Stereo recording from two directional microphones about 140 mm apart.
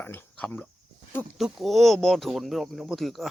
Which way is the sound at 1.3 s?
5° right (ahead or behind).